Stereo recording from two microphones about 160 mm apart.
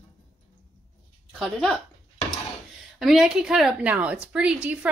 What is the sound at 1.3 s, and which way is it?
Speech, centre (ahead or behind).